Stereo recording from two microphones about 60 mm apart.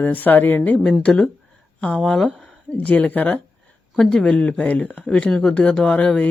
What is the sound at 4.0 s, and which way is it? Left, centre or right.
Speech, centre.